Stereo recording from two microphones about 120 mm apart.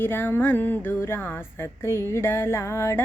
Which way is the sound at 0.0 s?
15° left (ahead or behind).